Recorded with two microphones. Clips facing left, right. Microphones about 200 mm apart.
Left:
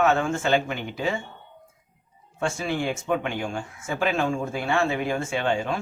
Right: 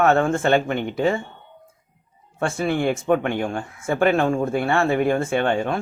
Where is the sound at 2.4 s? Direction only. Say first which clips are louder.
Right 5 dB; 55° right (ahead or behind).